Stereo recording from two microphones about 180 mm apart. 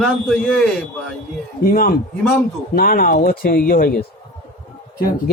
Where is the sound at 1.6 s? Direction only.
55° left (ahead or behind).